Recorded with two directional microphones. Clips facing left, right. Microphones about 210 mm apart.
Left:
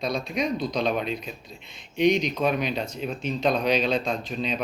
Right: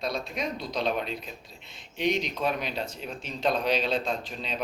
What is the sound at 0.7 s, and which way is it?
A man's voice, 15° left (ahead or behind).